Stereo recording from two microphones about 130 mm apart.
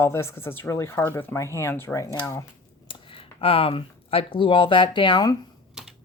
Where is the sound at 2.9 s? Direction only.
45° left (ahead or behind).